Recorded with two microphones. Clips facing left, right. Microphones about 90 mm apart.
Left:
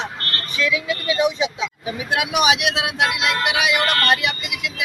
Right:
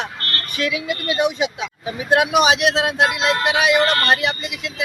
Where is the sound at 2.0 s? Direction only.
45° right (ahead or behind).